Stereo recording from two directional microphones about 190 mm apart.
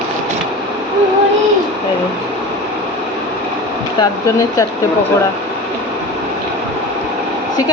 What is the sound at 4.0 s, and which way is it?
Speech, 20° left (ahead or behind).